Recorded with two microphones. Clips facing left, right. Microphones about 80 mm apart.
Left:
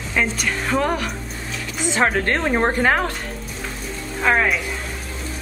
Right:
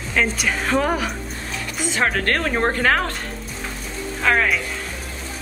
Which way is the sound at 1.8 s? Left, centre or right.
Left.